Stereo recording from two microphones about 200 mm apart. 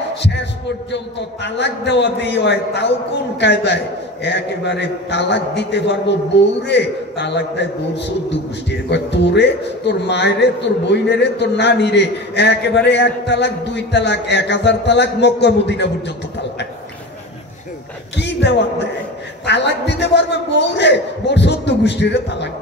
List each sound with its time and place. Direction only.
0.1 s heart sounds: 60° left (ahead or behind)
0.9 s a man's voice: 60° left (ahead or behind)
18.1 s a man's voice: 60° left (ahead or behind)